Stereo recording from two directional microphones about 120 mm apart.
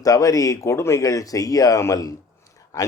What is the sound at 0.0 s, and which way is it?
Speech, 30° left (ahead or behind).